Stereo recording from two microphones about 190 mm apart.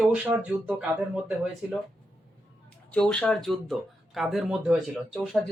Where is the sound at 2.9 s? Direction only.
5° left (ahead or behind).